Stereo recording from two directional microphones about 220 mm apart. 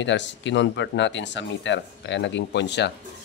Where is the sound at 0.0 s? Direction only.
55° left (ahead or behind).